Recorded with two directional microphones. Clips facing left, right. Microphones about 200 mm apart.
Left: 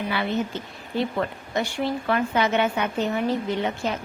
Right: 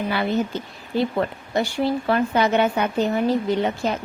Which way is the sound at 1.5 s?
35° right (ahead or behind).